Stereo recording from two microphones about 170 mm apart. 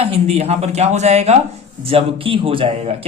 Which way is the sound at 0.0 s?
35° right (ahead or behind).